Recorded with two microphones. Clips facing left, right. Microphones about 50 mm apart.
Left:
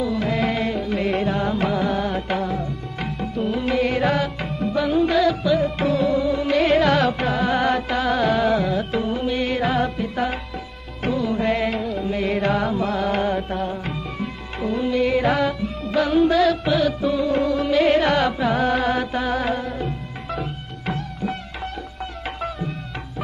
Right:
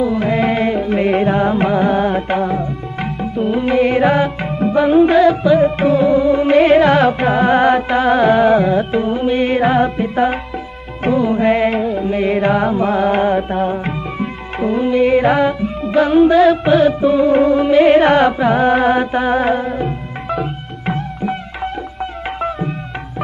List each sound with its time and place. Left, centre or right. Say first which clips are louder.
0.0 s music: right 6 dB; right
22.4 s tabla: right 8 dB; right